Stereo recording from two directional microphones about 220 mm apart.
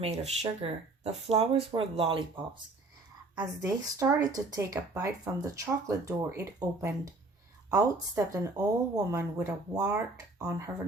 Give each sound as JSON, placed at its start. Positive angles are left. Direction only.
{"t": 0.6, "sound": "speech", "side_deg": -30}
{"t": 3.3, "sound": "speech", "side_deg": -15}